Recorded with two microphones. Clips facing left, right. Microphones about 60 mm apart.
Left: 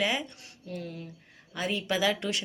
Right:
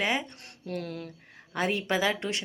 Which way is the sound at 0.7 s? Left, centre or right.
Right.